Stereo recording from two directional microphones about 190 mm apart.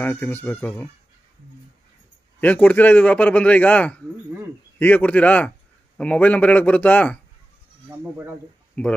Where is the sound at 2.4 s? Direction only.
10° left (ahead or behind).